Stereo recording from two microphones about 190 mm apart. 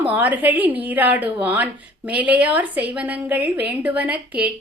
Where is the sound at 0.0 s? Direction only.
10° right (ahead or behind).